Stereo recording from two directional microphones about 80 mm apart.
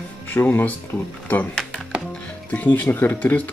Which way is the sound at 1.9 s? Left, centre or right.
Centre.